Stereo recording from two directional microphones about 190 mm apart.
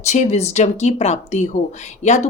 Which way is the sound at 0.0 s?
35° left (ahead or behind).